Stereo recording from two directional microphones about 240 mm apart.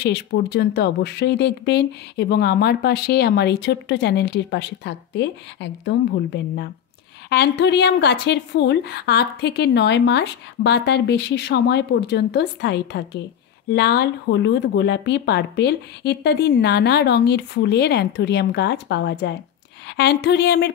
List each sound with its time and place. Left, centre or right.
0.0 s speech: left